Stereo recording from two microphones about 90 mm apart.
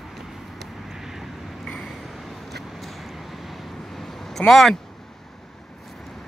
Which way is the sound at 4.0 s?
5° left (ahead or behind).